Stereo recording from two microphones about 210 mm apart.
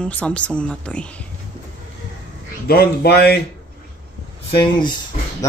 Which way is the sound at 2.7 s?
50° left (ahead or behind).